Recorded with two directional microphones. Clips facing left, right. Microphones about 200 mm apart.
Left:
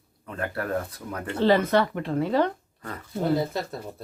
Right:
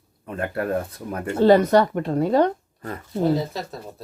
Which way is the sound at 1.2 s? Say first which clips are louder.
Right 6 dB; 45° right (ahead or behind).